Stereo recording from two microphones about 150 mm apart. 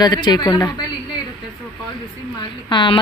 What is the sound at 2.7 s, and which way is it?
Speech, 35° left (ahead or behind).